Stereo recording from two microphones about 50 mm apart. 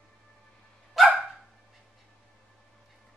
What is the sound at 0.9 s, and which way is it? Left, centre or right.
Dog, centre.